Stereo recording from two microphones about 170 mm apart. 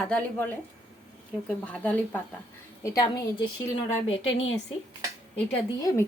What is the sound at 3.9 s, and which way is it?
Speech, 35° left (ahead or behind).